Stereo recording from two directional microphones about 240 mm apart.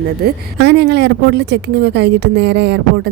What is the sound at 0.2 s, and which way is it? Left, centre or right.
Speech, right.